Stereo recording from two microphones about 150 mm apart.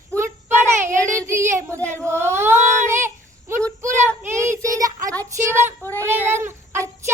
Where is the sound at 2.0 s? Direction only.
15° right (ahead or behind).